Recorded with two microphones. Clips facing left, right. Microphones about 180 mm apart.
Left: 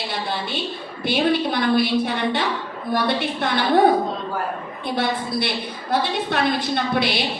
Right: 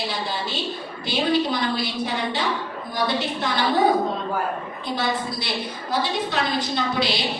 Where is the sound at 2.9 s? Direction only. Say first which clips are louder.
Left 3 dB; 55° left (ahead or behind).